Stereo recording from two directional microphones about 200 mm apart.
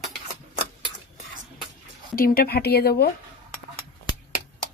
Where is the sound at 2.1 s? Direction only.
45° left (ahead or behind).